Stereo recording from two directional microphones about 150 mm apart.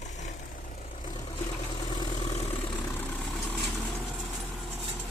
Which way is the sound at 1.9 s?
30° left (ahead or behind).